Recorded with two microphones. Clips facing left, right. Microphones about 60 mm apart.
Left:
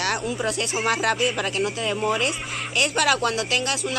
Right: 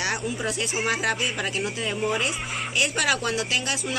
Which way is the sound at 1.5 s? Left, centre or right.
Centre.